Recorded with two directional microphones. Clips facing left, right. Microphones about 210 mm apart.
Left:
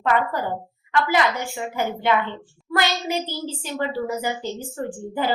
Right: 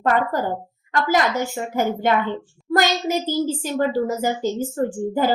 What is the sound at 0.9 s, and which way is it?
A woman's voice, 45° right (ahead or behind).